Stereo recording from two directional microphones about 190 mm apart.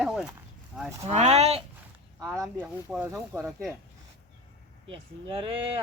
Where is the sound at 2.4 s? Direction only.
5° right (ahead or behind).